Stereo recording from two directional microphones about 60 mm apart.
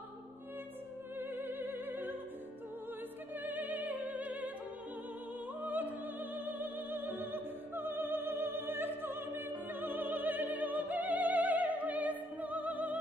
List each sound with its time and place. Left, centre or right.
1.3 s music: right
3.4 s music: right
5.6 s opera: right